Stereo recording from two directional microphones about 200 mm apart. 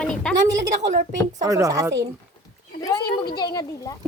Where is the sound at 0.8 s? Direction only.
45° right (ahead or behind).